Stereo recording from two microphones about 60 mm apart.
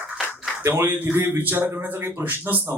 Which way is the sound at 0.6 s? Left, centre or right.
Right.